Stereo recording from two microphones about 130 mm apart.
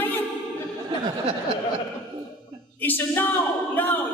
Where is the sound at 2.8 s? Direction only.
15° left (ahead or behind).